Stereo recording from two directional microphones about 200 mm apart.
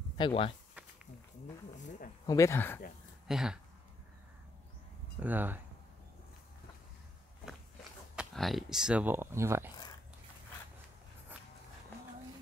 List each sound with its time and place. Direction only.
0.2 s speech: 25° left (ahead or behind)
2.2 s speech: 15° left (ahead or behind)
3.3 s speech: centre (ahead or behind)
5.2 s speech: 10° right (ahead or behind)
8.2 s speech: centre (ahead or behind)